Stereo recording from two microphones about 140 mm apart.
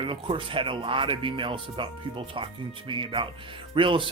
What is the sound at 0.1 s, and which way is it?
Speech, 40° right (ahead or behind).